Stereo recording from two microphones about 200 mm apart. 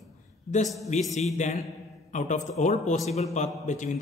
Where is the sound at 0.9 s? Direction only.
35° left (ahead or behind).